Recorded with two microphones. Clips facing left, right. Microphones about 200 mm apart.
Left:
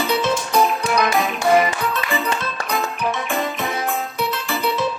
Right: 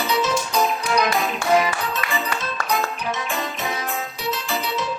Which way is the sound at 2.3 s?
55° left (ahead or behind).